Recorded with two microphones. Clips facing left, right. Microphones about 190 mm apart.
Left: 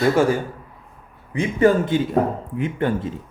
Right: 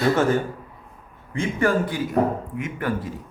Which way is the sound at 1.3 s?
20° left (ahead or behind).